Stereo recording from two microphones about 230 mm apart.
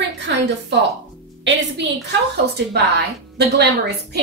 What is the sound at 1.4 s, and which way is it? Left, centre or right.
Speech, right.